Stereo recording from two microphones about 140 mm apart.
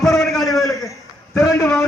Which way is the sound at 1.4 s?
25° left (ahead or behind).